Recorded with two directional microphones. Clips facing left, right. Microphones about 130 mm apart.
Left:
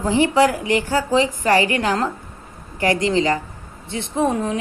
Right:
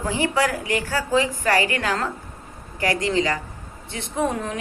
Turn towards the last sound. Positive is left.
turn(degrees=25)  # may be behind; listen again after turning